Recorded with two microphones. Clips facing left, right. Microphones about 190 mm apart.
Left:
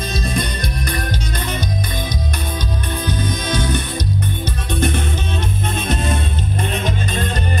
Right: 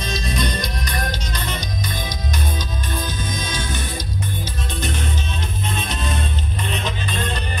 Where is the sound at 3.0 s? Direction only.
60° left (ahead or behind).